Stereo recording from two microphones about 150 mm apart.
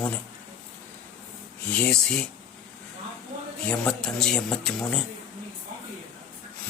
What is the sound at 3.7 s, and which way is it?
A man's voice, 5° left (ahead or behind).